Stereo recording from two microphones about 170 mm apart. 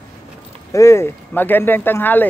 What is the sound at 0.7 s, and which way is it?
Speech, 15° left (ahead or behind).